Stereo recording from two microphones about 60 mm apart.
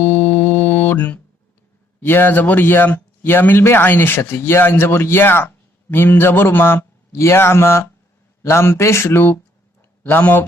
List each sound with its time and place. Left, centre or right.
0.0 s music: left
2.0 s speech: left
7.1 s speech: left